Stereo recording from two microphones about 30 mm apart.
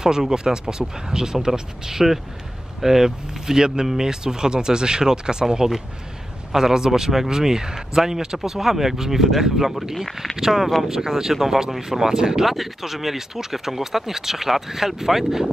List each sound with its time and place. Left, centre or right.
0.0 s speech: right